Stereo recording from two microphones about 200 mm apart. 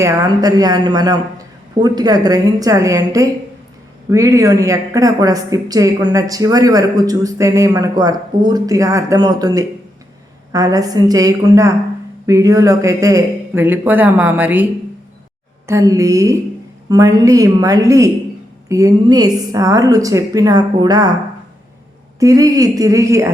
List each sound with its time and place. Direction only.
0.0 s a woman's voice: 20° right (ahead or behind)
22.2 s a woman's voice: 15° right (ahead or behind)